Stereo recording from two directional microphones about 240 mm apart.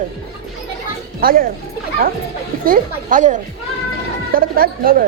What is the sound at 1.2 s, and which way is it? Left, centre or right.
Speech, right.